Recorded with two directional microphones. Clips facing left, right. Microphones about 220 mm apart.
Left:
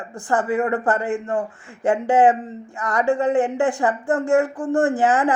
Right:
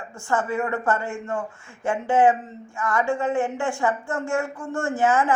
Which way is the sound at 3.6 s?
35° left (ahead or behind).